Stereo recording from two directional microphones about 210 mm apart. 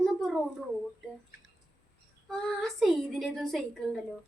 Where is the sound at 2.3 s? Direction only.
Centre (ahead or behind).